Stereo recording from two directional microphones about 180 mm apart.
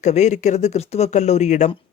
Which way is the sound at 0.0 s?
40° left (ahead or behind).